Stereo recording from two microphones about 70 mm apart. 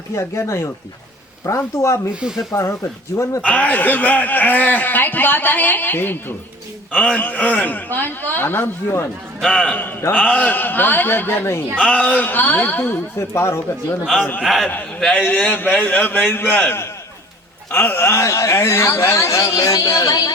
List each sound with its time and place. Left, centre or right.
0.2 s a man's voice: left
2.2 s speech: centre
2.6 s a man's voice: left
3.4 s a man's voice: left
6.9 s a man's voice: centre; by 9.0 s left
10.2 s a man's voice: centre; by 11.6 s left
11.8 s a man's voice: centre
12.8 s speech: left
14.0 s a man's voice: centre
15.2 s a man's voice: left